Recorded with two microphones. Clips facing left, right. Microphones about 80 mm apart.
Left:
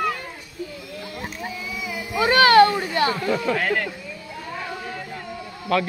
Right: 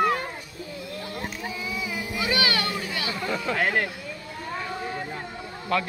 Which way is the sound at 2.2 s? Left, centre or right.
Left.